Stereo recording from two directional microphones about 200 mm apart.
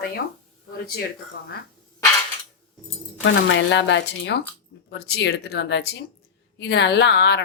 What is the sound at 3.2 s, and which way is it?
A woman's voice, 65° left (ahead or behind).